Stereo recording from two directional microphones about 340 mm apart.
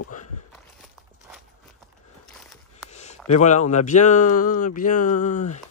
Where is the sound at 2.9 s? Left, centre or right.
Centre.